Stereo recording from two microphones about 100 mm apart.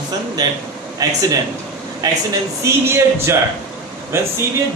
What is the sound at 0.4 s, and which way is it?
A man's voice, 40° right (ahead or behind).